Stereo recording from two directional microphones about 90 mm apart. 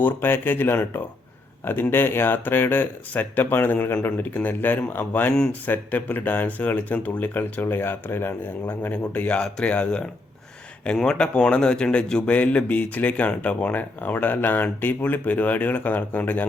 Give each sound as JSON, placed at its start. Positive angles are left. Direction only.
{"t": 0.0, "sound": "a man's voice", "side_deg": 25}